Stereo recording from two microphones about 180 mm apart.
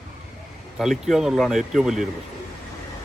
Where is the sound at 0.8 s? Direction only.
Centre (ahead or behind).